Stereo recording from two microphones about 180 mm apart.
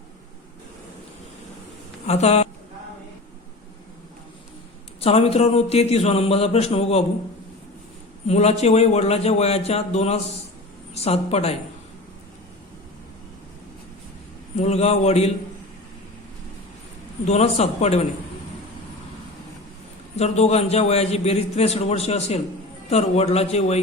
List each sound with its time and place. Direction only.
2.0 s a man's voice: 35° left (ahead or behind)
4.9 s a man's voice: 35° left (ahead or behind)
8.3 s a man's voice: 35° left (ahead or behind)
14.6 s a man's voice: 35° left (ahead or behind)
17.2 s a man's voice: 35° left (ahead or behind)
20.1 s a man's voice: 35° left (ahead or behind)